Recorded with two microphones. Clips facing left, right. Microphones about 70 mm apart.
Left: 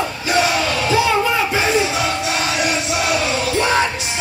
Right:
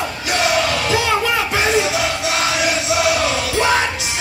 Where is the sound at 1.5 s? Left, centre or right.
Right.